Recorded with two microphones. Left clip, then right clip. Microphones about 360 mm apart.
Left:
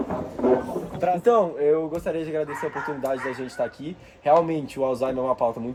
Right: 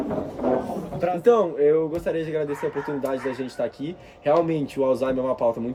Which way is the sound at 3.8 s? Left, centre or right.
Centre.